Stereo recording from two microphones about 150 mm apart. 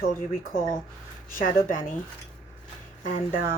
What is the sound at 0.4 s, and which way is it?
A woman's voice, 75° left (ahead or behind).